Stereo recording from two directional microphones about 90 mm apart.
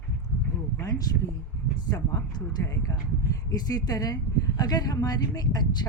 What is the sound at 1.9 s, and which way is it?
Speech, 40° left (ahead or behind).